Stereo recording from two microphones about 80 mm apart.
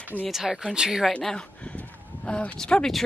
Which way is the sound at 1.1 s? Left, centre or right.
Centre.